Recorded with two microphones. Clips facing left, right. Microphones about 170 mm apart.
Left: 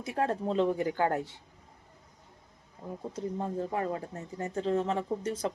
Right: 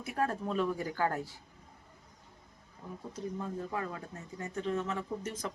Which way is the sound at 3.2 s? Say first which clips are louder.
Left 4 dB; 30° left (ahead or behind).